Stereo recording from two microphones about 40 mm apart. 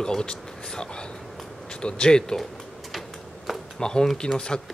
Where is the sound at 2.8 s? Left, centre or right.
Centre.